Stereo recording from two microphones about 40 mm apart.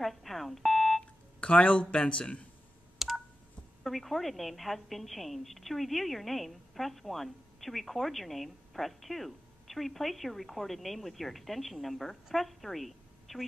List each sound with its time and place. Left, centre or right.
0.0 s a sound: centre
1.4 s speech: left
3.0 s telephone dialing: centre
3.8 s a woman's voice: centre